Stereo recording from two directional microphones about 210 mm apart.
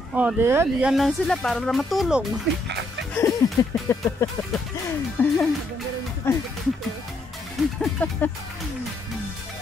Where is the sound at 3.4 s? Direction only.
15° left (ahead or behind).